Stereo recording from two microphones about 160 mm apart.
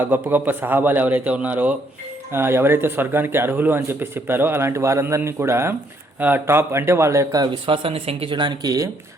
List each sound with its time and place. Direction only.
0.0 s a man's voice: 10° right (ahead or behind)